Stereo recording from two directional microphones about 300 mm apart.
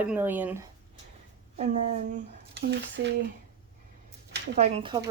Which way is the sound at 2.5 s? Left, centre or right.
Right.